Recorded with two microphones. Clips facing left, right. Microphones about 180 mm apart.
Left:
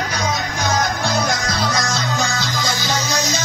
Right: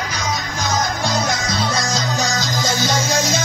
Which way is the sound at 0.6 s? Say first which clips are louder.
Left 1 dB; 60° left (ahead or behind).